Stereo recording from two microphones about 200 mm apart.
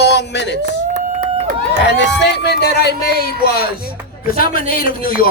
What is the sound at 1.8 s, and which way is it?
Speech, 60° left (ahead or behind).